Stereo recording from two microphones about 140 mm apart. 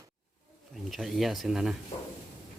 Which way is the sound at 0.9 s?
Centre (ahead or behind).